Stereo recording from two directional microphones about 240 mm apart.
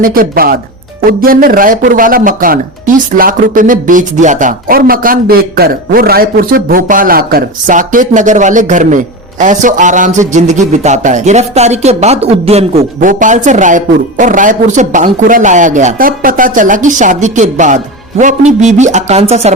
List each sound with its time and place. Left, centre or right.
0.0 s a man's voice: right